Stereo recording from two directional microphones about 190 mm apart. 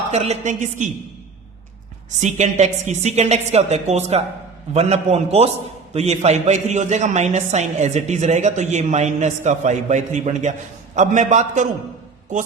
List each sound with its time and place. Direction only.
0.1 s a man's voice: 35° right (ahead or behind)
2.0 s a man's voice: 40° right (ahead or behind)